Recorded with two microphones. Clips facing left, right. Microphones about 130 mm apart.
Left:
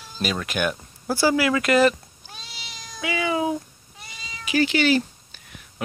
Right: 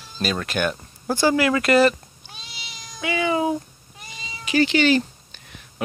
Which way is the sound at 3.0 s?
Centre (ahead or behind).